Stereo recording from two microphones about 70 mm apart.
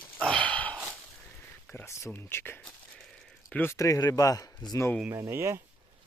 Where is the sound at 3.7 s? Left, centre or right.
Left.